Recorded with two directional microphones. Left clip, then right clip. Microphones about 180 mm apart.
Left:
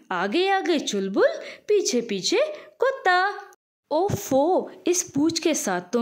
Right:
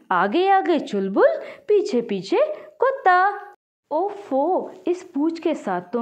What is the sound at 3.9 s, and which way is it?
Speech, 35° left (ahead or behind).